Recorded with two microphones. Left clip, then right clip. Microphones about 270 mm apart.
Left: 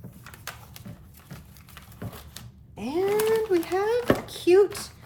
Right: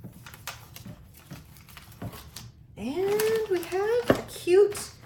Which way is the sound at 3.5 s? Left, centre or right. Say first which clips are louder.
Left 2 dB; centre.